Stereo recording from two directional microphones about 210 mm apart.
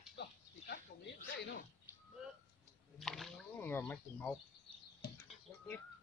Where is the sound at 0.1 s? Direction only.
55° left (ahead or behind).